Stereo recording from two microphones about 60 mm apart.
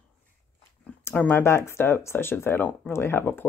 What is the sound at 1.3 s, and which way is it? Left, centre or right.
Speech, left.